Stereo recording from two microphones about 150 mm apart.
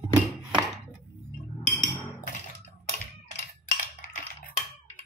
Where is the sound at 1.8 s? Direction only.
55° left (ahead or behind).